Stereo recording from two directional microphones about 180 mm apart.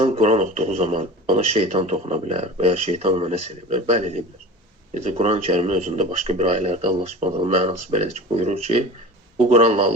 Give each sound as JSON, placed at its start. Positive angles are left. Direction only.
{"t": 0.0, "sound": "speech", "side_deg": -40}